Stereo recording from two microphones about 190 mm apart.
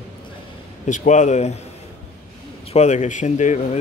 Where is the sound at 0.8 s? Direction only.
40° left (ahead or behind).